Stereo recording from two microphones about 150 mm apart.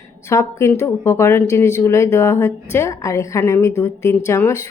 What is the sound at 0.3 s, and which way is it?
A woman's voice, 20° left (ahead or behind).